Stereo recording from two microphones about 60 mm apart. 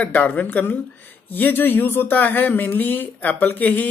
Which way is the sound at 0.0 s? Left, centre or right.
Left.